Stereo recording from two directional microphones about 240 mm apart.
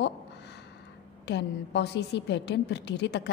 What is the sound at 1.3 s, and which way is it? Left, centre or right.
A woman's voice, left.